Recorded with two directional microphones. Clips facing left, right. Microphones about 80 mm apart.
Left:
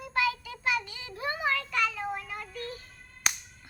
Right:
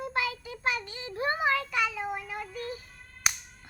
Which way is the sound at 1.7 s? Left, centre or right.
Centre.